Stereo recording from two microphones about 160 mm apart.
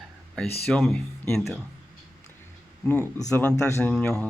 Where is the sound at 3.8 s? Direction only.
5° left (ahead or behind).